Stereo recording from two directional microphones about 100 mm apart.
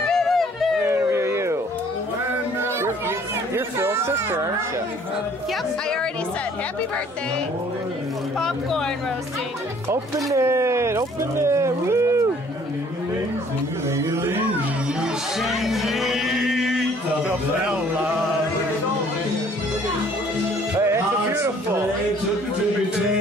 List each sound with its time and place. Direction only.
0.0 s music: 5° left (ahead or behind)
0.8 s a sound: 30° right (ahead or behind)
2.6 s a sound: 25° right (ahead or behind)
8.4 s speech: 5° left (ahead or behind)
9.8 s speech: 30° right (ahead or behind)
14.1 s speech: 25° right (ahead or behind)
15.0 s music: centre (ahead or behind)
20.7 s music: 25° right (ahead or behind)